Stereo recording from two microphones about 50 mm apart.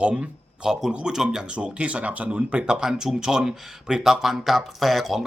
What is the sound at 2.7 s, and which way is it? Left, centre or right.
Speech, centre.